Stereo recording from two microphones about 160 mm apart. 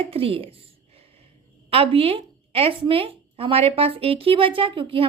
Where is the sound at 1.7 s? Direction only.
35° right (ahead or behind).